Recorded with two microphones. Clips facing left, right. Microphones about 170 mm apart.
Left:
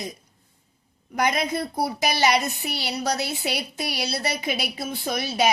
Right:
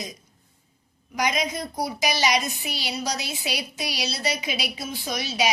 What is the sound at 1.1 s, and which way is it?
A woman's voice, 55° left (ahead or behind).